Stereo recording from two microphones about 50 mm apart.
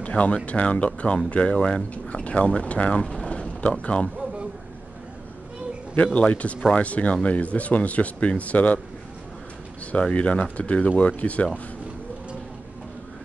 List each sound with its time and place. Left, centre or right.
0.0 s speech: left
6.1 s speech: left
9.8 s speech: left